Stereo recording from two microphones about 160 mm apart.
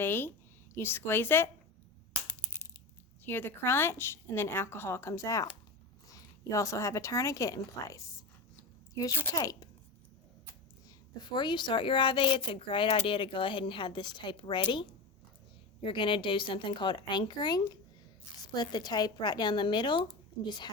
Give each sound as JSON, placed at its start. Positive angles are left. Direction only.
{"t": 0.0, "sound": "a woman's voice", "side_deg": 15}
{"t": 3.2, "sound": "a woman's voice", "side_deg": 15}
{"t": 10.8, "sound": "a child's voice", "side_deg": 25}